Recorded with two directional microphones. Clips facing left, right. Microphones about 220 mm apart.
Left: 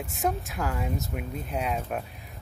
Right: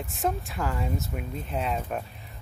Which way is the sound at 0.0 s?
Centre (ahead or behind).